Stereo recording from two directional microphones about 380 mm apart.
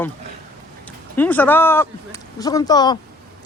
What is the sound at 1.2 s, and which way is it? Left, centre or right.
Speech, centre.